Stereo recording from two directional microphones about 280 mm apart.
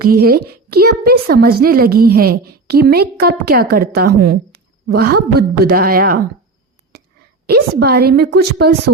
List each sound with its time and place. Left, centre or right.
0.0 s a woman's voice: right
7.4 s a woman's voice: right